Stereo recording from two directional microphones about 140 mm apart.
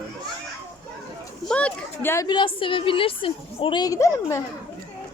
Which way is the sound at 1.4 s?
10° left (ahead or behind).